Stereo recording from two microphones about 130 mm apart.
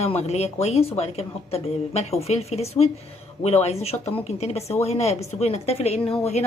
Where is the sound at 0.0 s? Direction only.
55° left (ahead or behind).